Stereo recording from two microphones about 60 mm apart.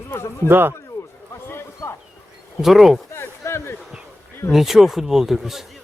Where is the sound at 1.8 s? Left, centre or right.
Left.